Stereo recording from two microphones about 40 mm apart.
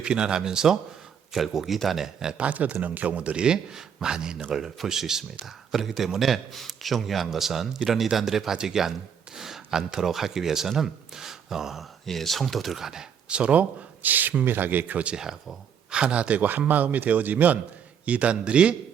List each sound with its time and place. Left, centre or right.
0.0 s speech: right
2.4 s speech: right; by 11.9 s centre
12.0 s speech: centre
13.2 s speech: right
15.2 s speech: centre
16.0 s speech: right
16.4 s speech: right
18.0 s a man's voice: right